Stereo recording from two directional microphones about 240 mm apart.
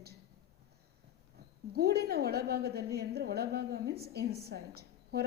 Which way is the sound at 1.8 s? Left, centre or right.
Right.